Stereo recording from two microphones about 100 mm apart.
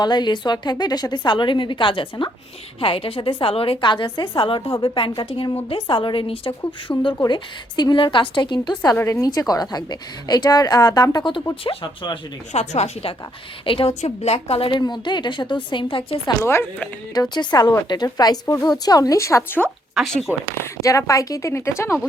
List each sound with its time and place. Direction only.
0.0 s a woman's voice: 45° left (ahead or behind)
2.8 s a woman's voice: 65° left (ahead or behind)
6.9 s speech: 25° left (ahead or behind)
7.3 s a woman's voice: 45° left (ahead or behind)
11.6 s speech: 60° left (ahead or behind); by 13.1 s 80° left
13.7 s a woman's voice: 65° left (ahead or behind)
14.7 s a woman's voice: 45° left (ahead or behind)
16.4 s speech: 25° left (ahead or behind)
17.2 s a woman's voice: 45° left (ahead or behind); by 19.6 s 20° left (ahead or behind)
20.0 s speech: centre (ahead or behind)
20.8 s a woman's voice: 30° left (ahead or behind)